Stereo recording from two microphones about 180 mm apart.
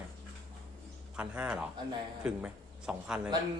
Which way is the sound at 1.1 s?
5° right (ahead or behind).